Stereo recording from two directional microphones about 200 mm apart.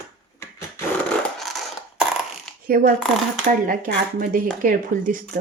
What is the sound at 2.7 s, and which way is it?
A woman's voice, 45° right (ahead or behind).